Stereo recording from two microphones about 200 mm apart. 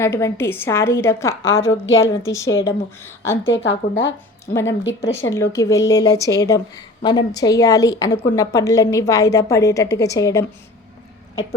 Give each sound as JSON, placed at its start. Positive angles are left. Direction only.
{"t": 0.0, "sound": "a woman's voice", "side_deg": 15}
{"t": 1.4, "sound": "speech", "side_deg": 75}
{"t": 2.6, "sound": "a woman's voice", "side_deg": 10}
{"t": 3.4, "sound": "speech", "side_deg": 70}
{"t": 5.3, "sound": "a woman's voice", "side_deg": 15}